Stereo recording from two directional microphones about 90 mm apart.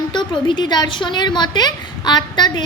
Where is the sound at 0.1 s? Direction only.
60° left (ahead or behind).